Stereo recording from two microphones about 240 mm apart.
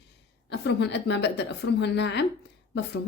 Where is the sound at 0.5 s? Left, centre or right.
Left.